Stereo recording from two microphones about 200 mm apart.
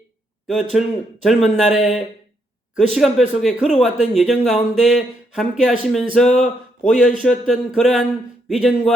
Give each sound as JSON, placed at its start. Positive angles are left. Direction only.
{"t": 0.4, "sound": "speech", "side_deg": 0}